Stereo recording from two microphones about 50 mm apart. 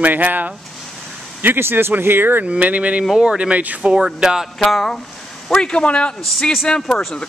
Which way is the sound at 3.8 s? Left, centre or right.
Centre.